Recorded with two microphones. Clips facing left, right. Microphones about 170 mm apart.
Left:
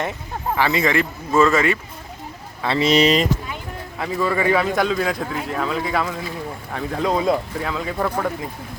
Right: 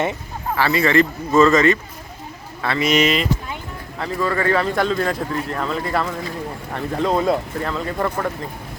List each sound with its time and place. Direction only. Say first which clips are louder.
0.5 s a man's voice: right 3 dB; 20° left (ahead or behind)
2.6 s speech: left 2 dB; 30° left (ahead or behind)
4.0 s a man's voice: even; 5° left (ahead or behind)